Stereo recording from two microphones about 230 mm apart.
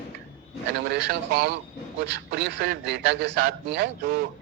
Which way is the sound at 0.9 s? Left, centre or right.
Right.